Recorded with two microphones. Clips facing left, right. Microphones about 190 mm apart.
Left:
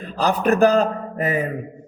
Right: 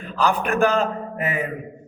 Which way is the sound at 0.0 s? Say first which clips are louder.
Left 2 dB; 35° left (ahead or behind).